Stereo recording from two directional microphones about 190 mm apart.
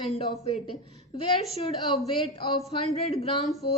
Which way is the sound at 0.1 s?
30° left (ahead or behind).